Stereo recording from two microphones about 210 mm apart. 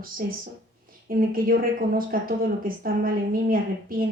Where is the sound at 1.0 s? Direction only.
45° right (ahead or behind).